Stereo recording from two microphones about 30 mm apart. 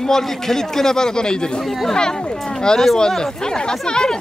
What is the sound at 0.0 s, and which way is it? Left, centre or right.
Speech, centre.